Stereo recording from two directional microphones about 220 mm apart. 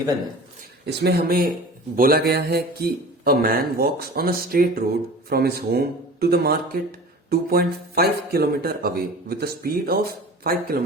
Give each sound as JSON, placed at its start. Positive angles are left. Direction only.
{"t": 0.9, "sound": "speech", "side_deg": -45}